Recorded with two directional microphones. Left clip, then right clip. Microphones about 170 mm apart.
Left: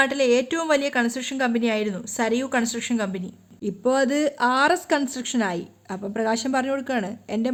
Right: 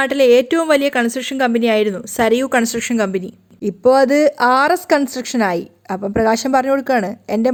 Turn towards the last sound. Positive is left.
turn(degrees=-35)  # may be behind; listen again after turning